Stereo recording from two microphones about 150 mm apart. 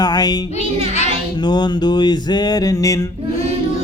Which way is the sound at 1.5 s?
30° left (ahead or behind).